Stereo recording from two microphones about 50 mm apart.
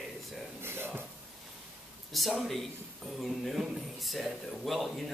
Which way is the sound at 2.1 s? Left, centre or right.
Centre.